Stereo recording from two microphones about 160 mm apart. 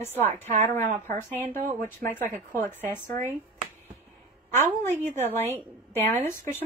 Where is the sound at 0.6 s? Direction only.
15° left (ahead or behind).